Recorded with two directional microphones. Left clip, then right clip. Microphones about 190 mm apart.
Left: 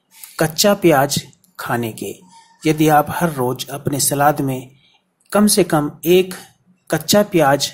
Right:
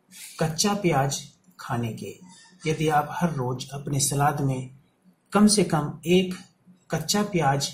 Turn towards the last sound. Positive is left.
turn(degrees=35)  # may be behind; listen again after turning